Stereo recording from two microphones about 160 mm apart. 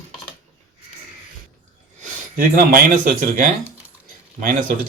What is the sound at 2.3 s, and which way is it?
Speech, 60° right (ahead or behind).